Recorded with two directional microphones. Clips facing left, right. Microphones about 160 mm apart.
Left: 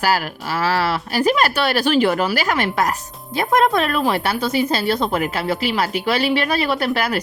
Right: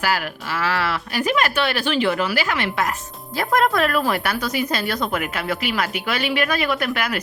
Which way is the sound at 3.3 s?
20° left (ahead or behind).